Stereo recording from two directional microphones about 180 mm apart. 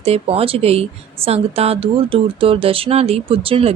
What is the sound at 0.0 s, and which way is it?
Speech, 35° right (ahead or behind).